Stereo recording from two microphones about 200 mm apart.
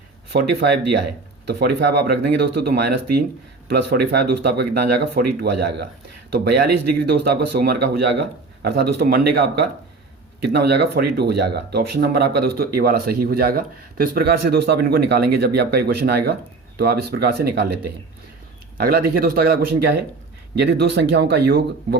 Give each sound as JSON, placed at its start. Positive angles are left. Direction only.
{"t": 0.3, "sound": "speech", "side_deg": -55}
{"t": 7.1, "sound": "speech", "side_deg": -55}